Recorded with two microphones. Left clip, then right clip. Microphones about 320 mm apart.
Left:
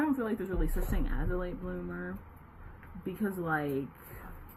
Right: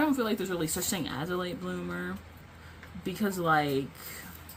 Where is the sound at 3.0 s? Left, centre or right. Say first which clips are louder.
Right 5 dB; centre.